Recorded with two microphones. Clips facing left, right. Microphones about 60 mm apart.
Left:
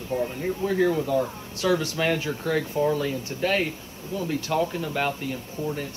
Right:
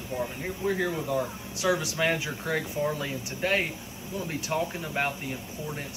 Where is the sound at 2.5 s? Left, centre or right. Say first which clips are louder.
Left 5 dB; right.